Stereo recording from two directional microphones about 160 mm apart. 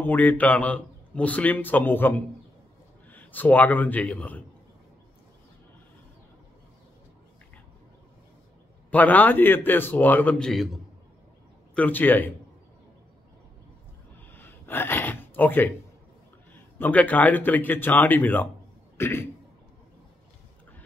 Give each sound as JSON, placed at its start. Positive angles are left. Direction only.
{"t": 0.0, "sound": "a man's voice", "side_deg": 10}
{"t": 8.9, "sound": "a man's voice", "side_deg": 10}
{"t": 11.7, "sound": "a man's voice", "side_deg": 10}
{"t": 14.3, "sound": "gasp", "side_deg": 15}
{"t": 16.7, "sound": "a man's voice", "side_deg": 10}